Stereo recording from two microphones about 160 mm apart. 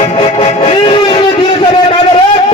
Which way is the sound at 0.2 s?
35° left (ahead or behind).